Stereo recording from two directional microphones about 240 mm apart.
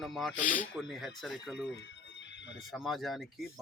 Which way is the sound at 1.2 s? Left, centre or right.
Centre.